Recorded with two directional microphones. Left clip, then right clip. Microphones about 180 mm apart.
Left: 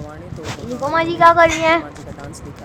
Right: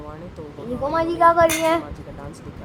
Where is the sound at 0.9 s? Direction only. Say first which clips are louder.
Left 4 dB; centre (ahead or behind).